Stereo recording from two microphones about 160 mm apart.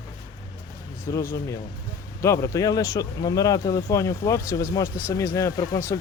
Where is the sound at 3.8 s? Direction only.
20° left (ahead or behind).